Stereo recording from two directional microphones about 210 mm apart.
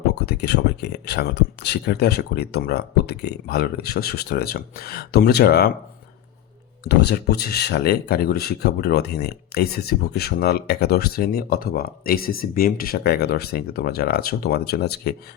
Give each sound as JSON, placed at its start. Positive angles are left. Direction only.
{"t": 0.1, "sound": "speech", "side_deg": 50}
{"t": 6.8, "sound": "speech", "side_deg": 50}